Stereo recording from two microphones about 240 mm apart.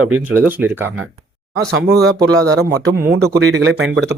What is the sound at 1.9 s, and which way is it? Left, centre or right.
Speech, right.